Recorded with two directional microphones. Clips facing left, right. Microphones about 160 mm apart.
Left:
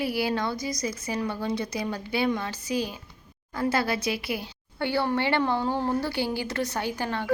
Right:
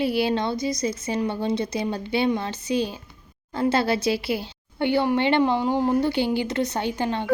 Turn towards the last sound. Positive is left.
turn(degrees=-20)  # may be behind; listen again after turning